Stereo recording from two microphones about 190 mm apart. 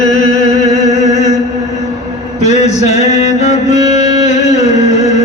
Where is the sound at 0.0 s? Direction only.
40° left (ahead or behind).